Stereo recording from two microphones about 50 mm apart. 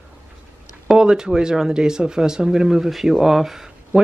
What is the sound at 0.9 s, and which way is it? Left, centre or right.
Speech, centre.